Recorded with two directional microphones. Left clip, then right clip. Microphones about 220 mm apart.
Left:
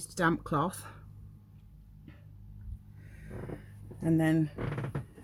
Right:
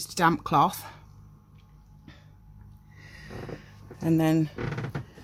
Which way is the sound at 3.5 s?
15° right (ahead or behind).